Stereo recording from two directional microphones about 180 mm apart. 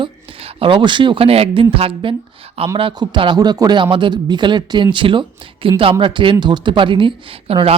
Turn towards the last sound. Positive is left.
turn(degrees=-30)  # may be behind; listen again after turning